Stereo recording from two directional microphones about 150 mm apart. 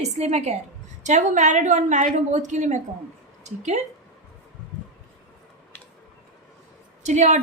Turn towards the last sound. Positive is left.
turn(degrees=-55)  # may be behind; listen again after turning